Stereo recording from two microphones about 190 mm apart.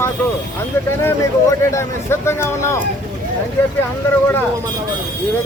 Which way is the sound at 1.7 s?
15° left (ahead or behind).